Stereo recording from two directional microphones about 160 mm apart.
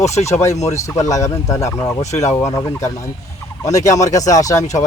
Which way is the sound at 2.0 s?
45° left (ahead or behind).